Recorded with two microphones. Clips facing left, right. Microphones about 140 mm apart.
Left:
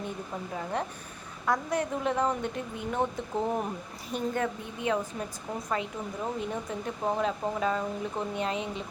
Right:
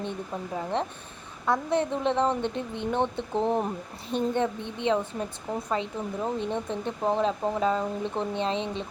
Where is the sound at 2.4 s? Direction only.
5° left (ahead or behind).